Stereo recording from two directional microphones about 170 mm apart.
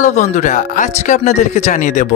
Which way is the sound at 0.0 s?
45° left (ahead or behind).